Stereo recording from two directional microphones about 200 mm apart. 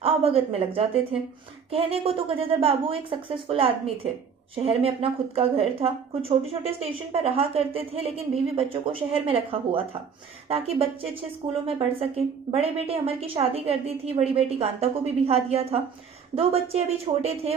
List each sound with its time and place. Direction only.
0.0 s a woman's voice: 30° right (ahead or behind)